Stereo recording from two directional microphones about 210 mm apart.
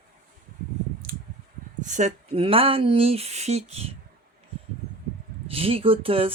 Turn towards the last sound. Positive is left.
turn(degrees=-25)  # may be behind; listen again after turning